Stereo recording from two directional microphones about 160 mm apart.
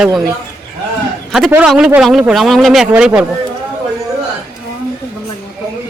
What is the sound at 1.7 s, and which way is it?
Speech, 5° right (ahead or behind).